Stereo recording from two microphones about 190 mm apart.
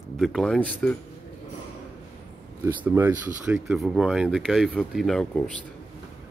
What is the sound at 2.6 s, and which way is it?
Speech, 15° right (ahead or behind).